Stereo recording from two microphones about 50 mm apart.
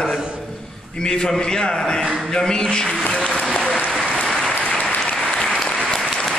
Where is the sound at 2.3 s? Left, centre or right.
Centre.